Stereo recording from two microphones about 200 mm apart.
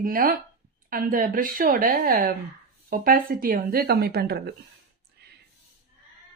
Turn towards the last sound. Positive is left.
turn(degrees=-55)  # may be behind; listen again after turning